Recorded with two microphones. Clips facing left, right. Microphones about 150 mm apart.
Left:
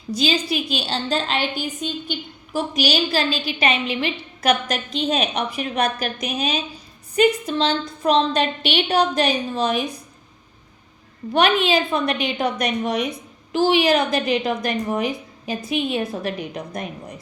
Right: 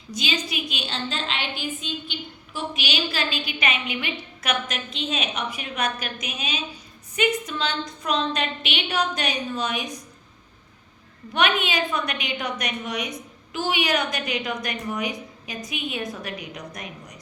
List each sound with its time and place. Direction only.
0.1 s a woman's voice: 35° left (ahead or behind)
11.3 s a woman's voice: 35° left (ahead or behind)